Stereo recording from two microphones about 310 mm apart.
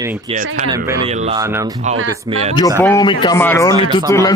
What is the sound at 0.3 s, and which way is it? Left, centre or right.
A man's voice, right.